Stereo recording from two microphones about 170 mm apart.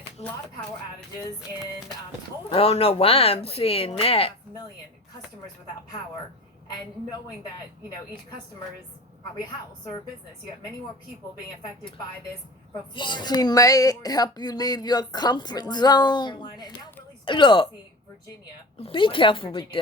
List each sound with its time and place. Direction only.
2.5 s speech: 35° left (ahead or behind)
12.9 s speech: 25° left (ahead or behind)
18.8 s speech: 30° left (ahead or behind)